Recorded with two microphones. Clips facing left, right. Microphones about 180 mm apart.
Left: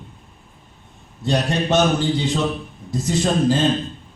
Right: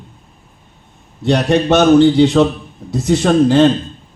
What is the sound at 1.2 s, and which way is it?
A man's voice, 70° right (ahead or behind).